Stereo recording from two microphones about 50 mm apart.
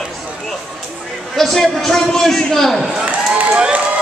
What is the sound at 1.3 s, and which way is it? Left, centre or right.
Speech, centre.